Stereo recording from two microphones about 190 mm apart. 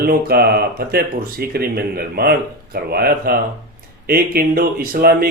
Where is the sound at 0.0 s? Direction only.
55° right (ahead or behind).